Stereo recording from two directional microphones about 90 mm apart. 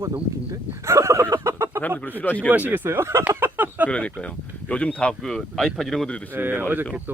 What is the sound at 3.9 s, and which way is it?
Speech, 10° left (ahead or behind).